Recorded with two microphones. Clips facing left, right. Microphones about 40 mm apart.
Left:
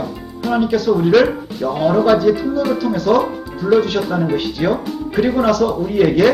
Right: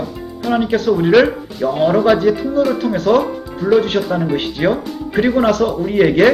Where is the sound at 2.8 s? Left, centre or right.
Right.